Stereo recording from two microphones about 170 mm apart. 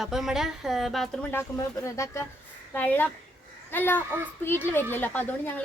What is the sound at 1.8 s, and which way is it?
A child's voice, 15° left (ahead or behind).